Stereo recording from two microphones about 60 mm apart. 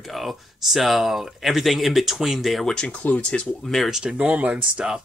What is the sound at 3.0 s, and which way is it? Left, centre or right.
Speech, left.